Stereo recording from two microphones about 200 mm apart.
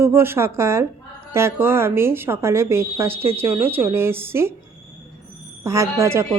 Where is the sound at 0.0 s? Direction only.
10° right (ahead or behind).